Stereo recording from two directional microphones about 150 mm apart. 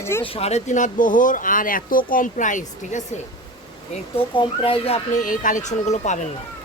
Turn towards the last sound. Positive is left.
turn(degrees=50)  # may be behind; listen again after turning